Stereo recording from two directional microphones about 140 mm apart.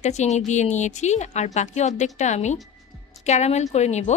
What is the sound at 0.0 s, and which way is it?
A woman's voice, 55° left (ahead or behind).